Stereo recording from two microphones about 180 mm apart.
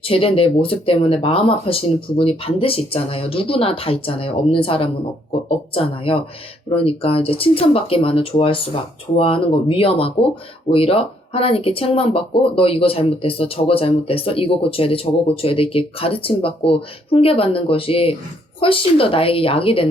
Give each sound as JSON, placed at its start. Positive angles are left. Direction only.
{"t": 0.0, "sound": "speech", "side_deg": 30}